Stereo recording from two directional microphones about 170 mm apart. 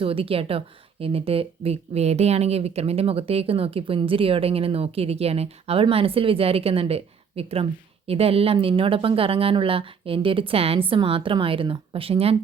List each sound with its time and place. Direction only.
0.0 s a woman's voice: 35° right (ahead or behind)